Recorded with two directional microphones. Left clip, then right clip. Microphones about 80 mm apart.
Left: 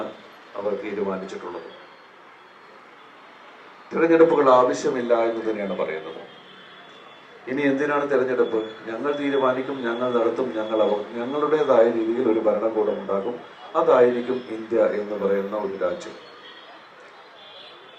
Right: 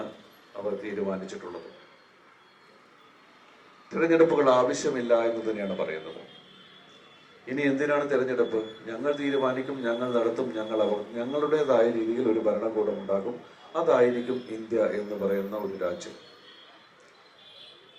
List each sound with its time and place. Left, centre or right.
0.5 s a man's voice: centre
3.8 s a man's voice: centre
7.4 s a man's voice: centre